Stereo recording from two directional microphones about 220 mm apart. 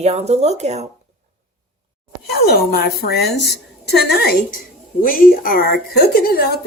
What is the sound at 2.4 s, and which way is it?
A woman's voice, 45° left (ahead or behind).